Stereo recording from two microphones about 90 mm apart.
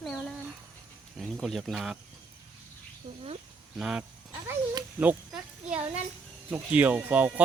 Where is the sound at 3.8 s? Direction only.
10° right (ahead or behind).